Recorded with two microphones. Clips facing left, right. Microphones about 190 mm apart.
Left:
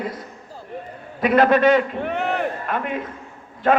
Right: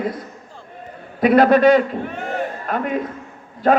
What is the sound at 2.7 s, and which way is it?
Speech, 40° right (ahead or behind).